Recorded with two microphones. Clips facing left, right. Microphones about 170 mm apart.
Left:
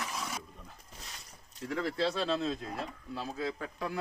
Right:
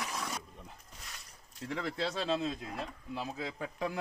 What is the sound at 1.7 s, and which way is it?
A man's voice, 20° right (ahead or behind).